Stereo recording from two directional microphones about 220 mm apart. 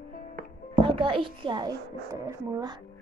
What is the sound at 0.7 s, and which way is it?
A woman's voice, 25° right (ahead or behind).